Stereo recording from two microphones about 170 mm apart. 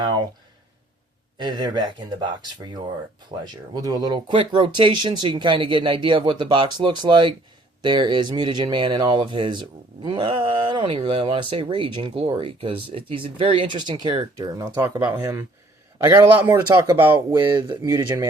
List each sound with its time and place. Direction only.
0.0 s speech: 25° right (ahead or behind)
1.4 s speech: 25° right (ahead or behind)
17.3 s speech: 25° right (ahead or behind)
17.8 s speech: 15° right (ahead or behind)